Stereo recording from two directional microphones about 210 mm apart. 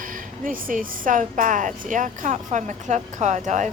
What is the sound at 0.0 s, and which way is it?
Speech, 40° right (ahead or behind).